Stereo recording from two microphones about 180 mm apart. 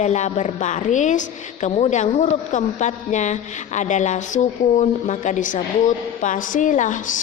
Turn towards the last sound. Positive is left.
turn(degrees=45)  # may be behind; listen again after turning